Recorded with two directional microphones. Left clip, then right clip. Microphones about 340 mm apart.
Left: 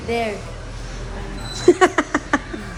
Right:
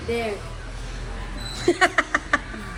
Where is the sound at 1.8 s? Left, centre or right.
Left.